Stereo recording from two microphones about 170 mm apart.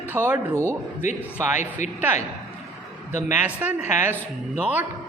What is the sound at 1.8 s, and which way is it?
Speech, 45° left (ahead or behind).